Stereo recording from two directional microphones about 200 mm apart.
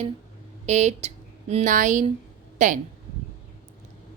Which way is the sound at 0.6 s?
35° right (ahead or behind).